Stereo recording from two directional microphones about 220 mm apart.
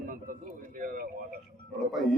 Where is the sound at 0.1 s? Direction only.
40° right (ahead or behind).